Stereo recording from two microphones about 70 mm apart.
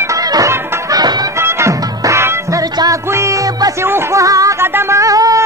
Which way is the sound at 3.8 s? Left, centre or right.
Right.